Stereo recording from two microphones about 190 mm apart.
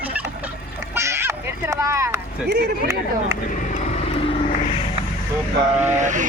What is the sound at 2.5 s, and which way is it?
Speech, 60° right (ahead or behind).